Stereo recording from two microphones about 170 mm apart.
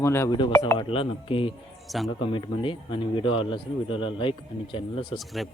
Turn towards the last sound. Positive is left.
turn(degrees=0)  # may be behind; listen again after turning